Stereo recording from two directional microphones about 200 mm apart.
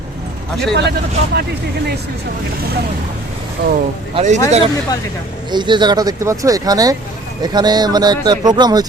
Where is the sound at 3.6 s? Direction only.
55° right (ahead or behind).